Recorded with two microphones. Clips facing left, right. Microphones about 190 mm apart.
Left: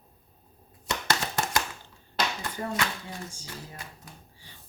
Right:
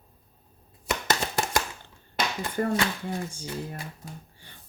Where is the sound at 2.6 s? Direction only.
55° right (ahead or behind).